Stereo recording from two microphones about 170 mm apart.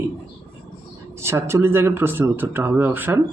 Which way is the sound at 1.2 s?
15° right (ahead or behind).